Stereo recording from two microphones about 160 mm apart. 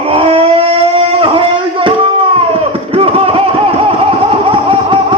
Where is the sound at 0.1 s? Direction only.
35° right (ahead or behind).